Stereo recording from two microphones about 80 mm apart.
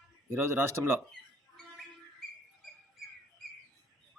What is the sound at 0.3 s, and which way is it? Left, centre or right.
Speech, right.